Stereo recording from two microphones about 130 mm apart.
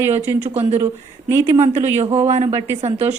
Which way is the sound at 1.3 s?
20° right (ahead or behind).